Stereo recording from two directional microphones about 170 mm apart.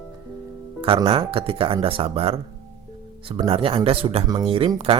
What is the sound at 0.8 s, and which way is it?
Speech, 30° right (ahead or behind).